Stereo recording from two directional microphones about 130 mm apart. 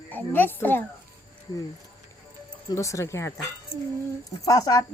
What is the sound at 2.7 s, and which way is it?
Speech, 25° left (ahead or behind).